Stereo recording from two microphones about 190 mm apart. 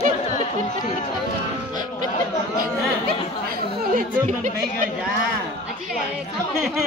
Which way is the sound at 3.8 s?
45° right (ahead or behind).